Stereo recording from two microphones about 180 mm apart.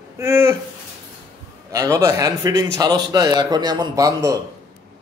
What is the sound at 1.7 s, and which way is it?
A man's voice, 20° right (ahead or behind).